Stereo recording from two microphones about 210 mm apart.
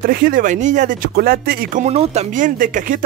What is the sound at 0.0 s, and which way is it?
Speech, 45° right (ahead or behind).